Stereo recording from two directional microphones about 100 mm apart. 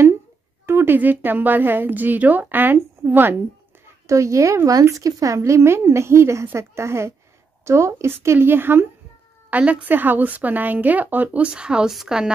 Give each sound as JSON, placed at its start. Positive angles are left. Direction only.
{"t": 0.7, "sound": "speech", "side_deg": -25}
{"t": 3.8, "sound": "speech", "side_deg": -30}